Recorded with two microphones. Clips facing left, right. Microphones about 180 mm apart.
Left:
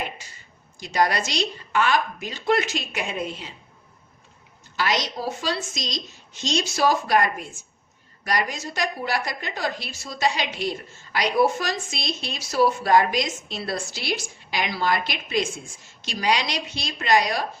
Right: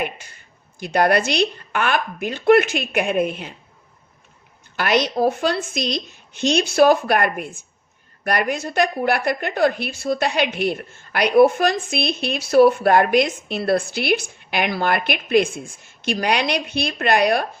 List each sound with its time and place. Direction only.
0.0 s a woman's voice: 55° right (ahead or behind)
4.8 s a woman's voice: 60° right (ahead or behind)